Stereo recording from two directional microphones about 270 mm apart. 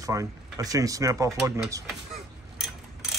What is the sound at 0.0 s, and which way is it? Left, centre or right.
Speech, centre.